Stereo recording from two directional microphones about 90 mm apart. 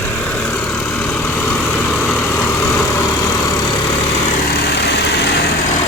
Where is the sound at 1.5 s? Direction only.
10° left (ahead or behind).